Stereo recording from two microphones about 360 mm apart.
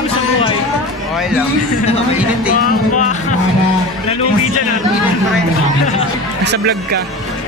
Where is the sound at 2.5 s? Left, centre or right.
Left.